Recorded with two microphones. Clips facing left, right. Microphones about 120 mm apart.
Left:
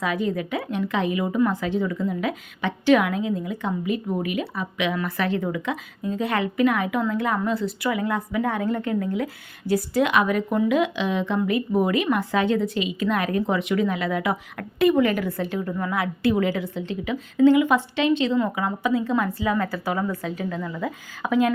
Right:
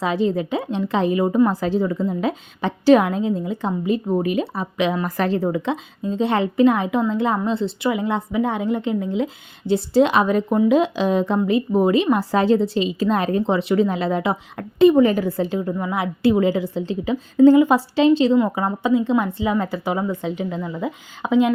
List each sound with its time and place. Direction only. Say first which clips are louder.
0.0 s a woman's voice: right 4 dB; 30° right (ahead or behind)
11.3 s a woman's voice: right 4 dB; 25° right (ahead or behind)